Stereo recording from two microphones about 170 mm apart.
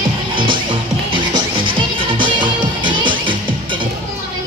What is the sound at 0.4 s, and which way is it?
Music, 30° right (ahead or behind).